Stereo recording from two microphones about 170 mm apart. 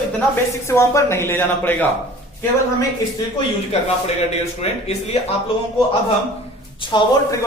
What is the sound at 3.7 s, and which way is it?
Speech, 40° left (ahead or behind).